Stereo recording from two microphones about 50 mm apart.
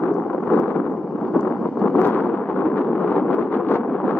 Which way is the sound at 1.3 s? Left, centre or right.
Left.